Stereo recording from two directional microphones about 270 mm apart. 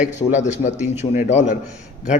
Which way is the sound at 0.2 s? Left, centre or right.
Left.